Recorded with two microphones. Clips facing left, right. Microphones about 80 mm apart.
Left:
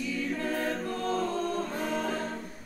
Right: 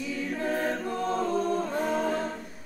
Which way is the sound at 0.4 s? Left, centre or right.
Centre.